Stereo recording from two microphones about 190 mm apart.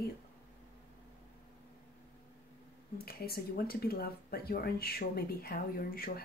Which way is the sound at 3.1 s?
55° left (ahead or behind).